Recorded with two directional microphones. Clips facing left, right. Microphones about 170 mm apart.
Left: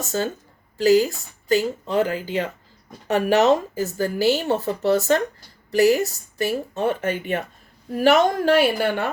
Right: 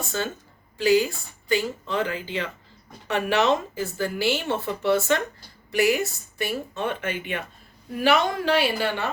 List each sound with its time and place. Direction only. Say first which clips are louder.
0.0 s a woman's voice: left 4 dB; 40° left (ahead or behind)